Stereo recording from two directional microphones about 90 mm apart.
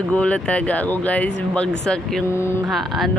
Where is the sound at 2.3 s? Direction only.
30° left (ahead or behind).